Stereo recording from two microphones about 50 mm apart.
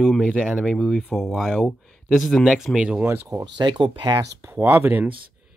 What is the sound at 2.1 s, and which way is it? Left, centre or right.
Speech, centre.